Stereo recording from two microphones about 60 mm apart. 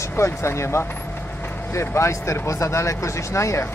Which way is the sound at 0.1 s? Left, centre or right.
Left.